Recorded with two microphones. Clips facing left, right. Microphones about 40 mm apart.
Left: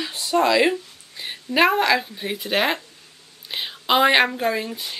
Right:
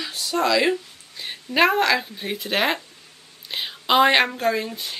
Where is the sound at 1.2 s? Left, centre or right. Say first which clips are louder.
Left 1 dB; centre.